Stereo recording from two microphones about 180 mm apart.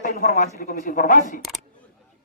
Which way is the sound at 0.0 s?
50° left (ahead or behind).